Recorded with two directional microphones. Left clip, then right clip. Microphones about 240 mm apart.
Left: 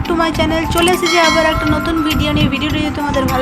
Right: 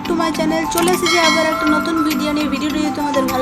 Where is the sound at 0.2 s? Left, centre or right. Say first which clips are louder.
Left 3 dB; centre.